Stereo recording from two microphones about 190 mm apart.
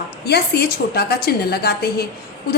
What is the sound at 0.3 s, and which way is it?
A woman's voice, 55° left (ahead or behind).